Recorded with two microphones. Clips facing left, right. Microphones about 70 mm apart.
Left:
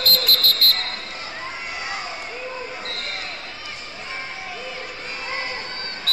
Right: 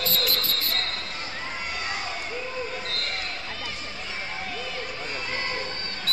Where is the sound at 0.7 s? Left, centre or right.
Centre.